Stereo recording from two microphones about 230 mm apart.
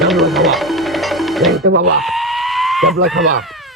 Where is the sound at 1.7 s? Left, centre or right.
Right.